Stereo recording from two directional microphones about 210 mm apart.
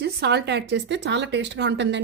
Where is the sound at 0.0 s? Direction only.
50° right (ahead or behind).